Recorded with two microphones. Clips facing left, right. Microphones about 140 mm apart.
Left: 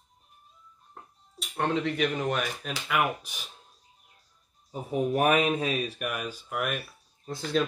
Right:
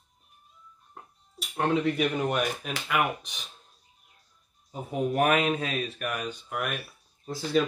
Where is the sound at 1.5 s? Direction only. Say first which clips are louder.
Right 2 dB; 10° right (ahead or behind).